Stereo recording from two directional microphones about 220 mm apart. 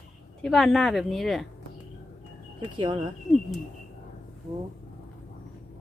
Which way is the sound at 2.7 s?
20° right (ahead or behind).